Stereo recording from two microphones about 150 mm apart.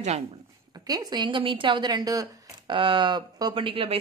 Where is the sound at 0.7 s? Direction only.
25° right (ahead or behind).